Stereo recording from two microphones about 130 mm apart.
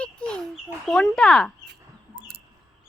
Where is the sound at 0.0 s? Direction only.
5° left (ahead or behind).